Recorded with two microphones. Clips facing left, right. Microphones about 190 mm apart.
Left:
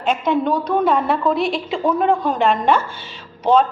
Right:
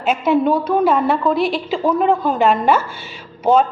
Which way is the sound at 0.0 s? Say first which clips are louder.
Right 3 dB; 5° right (ahead or behind).